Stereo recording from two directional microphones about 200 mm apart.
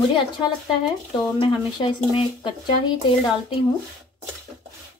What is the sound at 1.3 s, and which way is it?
Speech, 25° left (ahead or behind).